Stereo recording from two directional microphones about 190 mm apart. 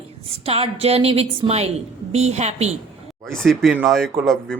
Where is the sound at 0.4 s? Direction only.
30° right (ahead or behind).